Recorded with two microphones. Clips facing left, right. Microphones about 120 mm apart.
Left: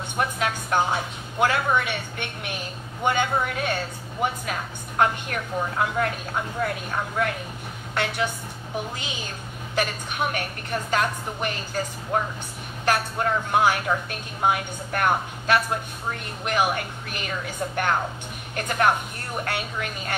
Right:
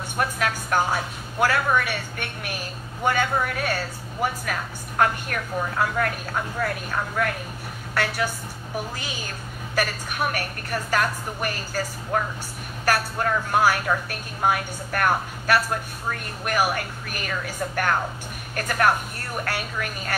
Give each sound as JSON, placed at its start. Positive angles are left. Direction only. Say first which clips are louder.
{"t": 0.2, "sound": "a woman's voice", "louder": "even", "side_deg": 20}